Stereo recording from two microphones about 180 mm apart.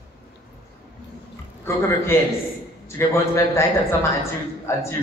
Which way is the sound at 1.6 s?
15° left (ahead or behind).